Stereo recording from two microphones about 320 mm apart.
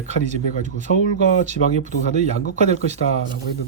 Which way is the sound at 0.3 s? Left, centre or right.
Right.